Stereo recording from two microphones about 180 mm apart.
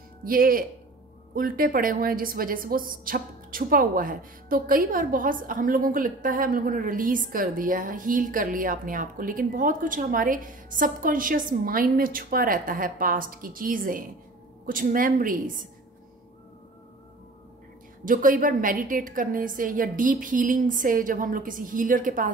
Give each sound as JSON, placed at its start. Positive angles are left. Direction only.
{"t": 0.2, "sound": "a woman's voice", "side_deg": -50}
{"t": 18.0, "sound": "a woman's voice", "side_deg": -50}